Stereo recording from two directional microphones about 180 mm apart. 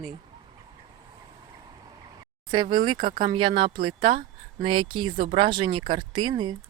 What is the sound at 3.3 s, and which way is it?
Speech, 25° right (ahead or behind).